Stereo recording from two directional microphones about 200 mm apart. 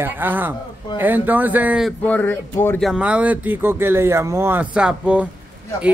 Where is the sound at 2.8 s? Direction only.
5° right (ahead or behind).